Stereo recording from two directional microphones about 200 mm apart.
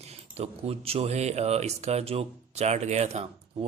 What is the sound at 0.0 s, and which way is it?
Speech, 30° right (ahead or behind).